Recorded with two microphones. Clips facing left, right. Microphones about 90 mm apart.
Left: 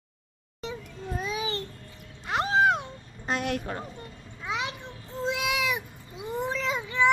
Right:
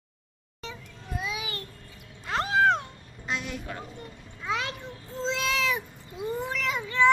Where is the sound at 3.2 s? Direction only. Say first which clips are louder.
Left 5 dB; 50° left (ahead or behind).